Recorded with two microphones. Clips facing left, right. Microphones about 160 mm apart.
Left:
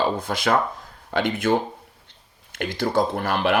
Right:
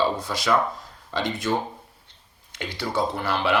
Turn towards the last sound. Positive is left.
turn(degrees=45)  # may be behind; listen again after turning